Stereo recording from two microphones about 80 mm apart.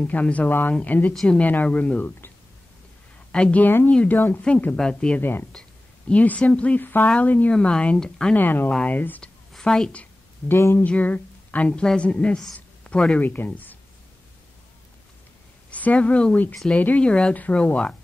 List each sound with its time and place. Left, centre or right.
0.0 s speech: centre
1.1 s a woman's voice: centre
1.4 s speech: centre
4.7 s a woman's voice: centre
5.2 s speech: left
5.5 s a sound: centre
6.1 s a woman's voice: centre
8.4 s speech: left
9.5 s a woman's voice: centre
10.5 s speech: left
10.9 s a woman's voice: centre
12.5 s a sound: centre
13.2 s speech: left
15.7 s a woman's voice: centre